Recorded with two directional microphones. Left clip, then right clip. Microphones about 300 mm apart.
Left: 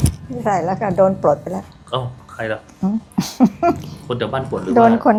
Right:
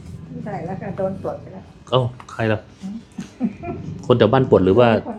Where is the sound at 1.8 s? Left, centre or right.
Right.